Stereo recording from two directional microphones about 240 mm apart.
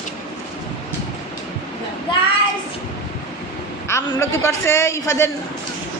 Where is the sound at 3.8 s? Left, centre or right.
Centre.